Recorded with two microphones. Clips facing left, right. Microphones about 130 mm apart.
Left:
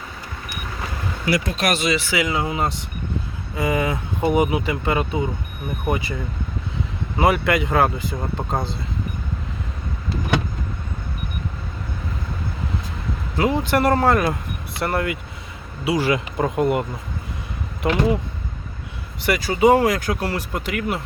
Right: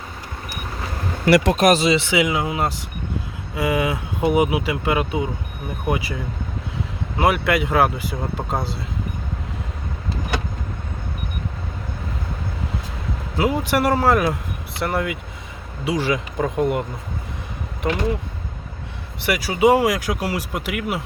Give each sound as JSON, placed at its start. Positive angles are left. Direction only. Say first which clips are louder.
{"t": 1.5, "sound": "speech", "louder": "right 7 dB", "side_deg": -40}
{"t": 1.8, "sound": "speech", "louder": "right 3 dB", "side_deg": -25}
{"t": 2.3, "sound": "speech", "louder": "even", "side_deg": -5}
{"t": 7.2, "sound": "speech", "louder": "even", "side_deg": 0}
{"t": 13.3, "sound": "speech", "louder": "even", "side_deg": -5}
{"t": 17.8, "sound": "speech", "louder": "left 2 dB", "side_deg": 5}
{"t": 19.2, "sound": "speech", "louder": "even", "side_deg": -10}